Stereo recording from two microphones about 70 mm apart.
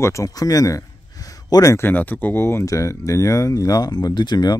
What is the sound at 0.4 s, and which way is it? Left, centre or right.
Speech, left.